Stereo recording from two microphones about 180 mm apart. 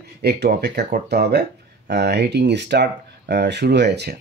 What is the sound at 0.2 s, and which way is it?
Speech, 65° right (ahead or behind).